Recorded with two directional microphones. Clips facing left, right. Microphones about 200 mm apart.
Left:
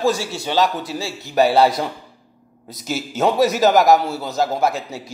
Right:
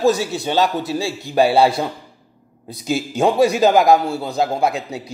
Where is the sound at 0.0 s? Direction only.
15° right (ahead or behind).